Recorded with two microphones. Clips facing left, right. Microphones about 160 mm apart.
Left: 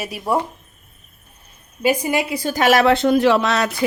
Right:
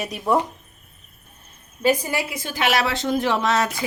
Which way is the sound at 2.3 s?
40° left (ahead or behind).